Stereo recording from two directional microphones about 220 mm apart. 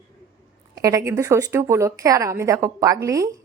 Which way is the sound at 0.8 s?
15° right (ahead or behind).